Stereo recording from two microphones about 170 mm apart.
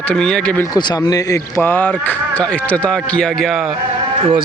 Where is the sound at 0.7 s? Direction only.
20° left (ahead or behind); by 3.6 s centre (ahead or behind).